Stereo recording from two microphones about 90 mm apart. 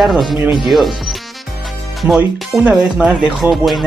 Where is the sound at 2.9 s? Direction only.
10° right (ahead or behind).